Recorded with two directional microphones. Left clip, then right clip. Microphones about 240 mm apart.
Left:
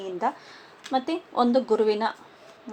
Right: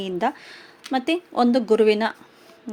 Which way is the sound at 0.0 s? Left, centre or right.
Right.